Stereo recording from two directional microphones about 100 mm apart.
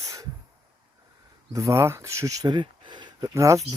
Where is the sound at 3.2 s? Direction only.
35° right (ahead or behind).